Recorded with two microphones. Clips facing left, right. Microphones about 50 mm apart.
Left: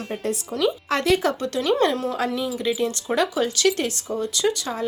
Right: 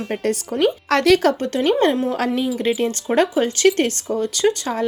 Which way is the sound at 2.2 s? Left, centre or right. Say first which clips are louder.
Right 4 dB; right.